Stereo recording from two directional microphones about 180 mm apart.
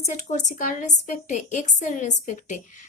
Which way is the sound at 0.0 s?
40° left (ahead or behind).